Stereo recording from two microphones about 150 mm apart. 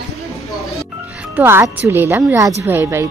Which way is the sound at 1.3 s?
15° right (ahead or behind).